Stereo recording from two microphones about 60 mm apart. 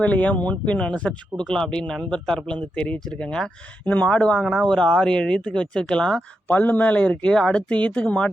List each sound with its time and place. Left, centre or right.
0.0 s speech: left
6.5 s speech: left